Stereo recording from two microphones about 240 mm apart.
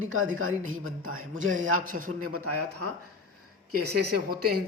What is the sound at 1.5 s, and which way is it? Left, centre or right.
Speech, right.